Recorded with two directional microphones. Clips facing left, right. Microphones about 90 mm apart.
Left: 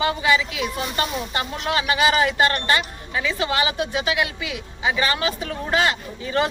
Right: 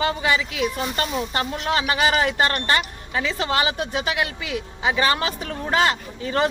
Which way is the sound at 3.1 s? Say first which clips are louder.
Even; 40° right (ahead or behind).